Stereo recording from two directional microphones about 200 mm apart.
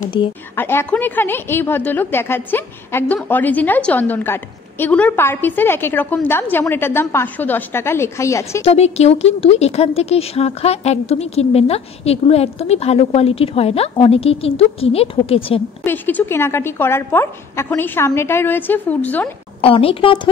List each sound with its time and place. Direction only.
0.2 s a woman's voice: 25° left (ahead or behind)
0.6 s a woman's voice: 10° left (ahead or behind)
8.6 s a woman's voice: 30° left (ahead or behind)
15.8 s a woman's voice: 10° left (ahead or behind)
19.6 s a woman's voice: 25° left (ahead or behind)